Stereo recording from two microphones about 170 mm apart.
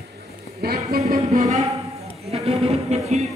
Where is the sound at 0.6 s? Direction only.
65° right (ahead or behind).